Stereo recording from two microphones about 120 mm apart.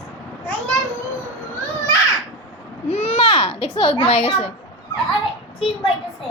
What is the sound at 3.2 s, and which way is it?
Speech, 40° left (ahead or behind).